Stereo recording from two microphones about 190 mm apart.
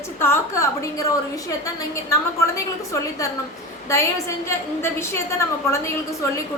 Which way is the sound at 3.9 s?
15° left (ahead or behind).